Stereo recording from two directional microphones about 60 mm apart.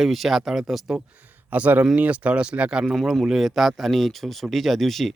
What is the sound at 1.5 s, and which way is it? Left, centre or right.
Speech, right.